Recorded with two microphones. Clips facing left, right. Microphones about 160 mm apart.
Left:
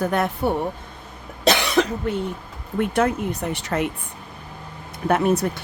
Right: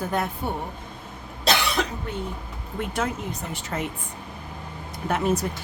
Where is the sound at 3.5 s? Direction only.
75° left (ahead or behind).